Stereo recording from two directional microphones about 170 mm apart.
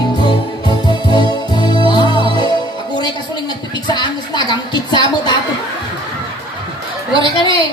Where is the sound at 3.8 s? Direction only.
25° left (ahead or behind).